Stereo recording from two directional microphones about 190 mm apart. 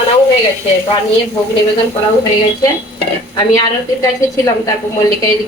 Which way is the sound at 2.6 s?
20° left (ahead or behind).